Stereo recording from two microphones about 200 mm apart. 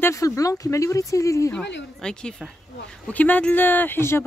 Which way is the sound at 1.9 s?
5° left (ahead or behind).